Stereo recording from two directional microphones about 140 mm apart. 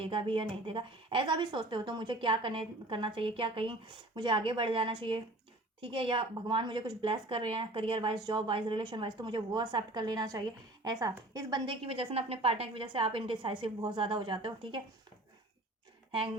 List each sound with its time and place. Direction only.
0.0 s a woman's voice: 40° right (ahead or behind)